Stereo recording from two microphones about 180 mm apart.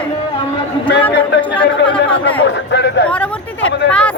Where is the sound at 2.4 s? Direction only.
75° left (ahead or behind).